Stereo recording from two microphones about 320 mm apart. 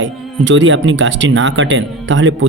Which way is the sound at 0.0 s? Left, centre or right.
Right.